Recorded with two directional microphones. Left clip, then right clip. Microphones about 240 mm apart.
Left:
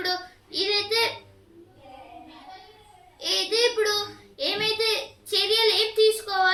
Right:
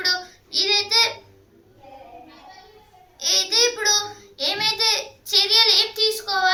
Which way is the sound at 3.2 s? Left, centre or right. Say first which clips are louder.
Right 4 dB; centre.